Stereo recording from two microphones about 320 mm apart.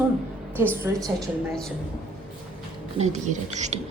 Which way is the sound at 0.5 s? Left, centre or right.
Centre.